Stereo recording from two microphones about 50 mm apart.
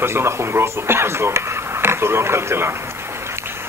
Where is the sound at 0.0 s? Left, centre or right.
Right.